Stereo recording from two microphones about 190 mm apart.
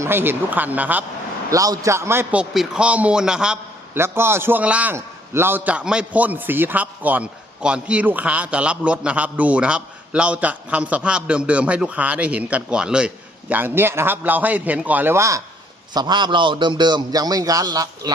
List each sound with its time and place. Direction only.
0.0 s a man's voice: 10° right (ahead or behind)